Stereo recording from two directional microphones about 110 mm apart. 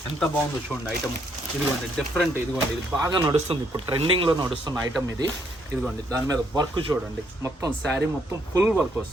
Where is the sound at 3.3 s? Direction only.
60° right (ahead or behind).